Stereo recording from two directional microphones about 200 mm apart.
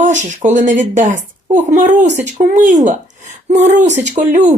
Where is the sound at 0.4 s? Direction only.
40° right (ahead or behind).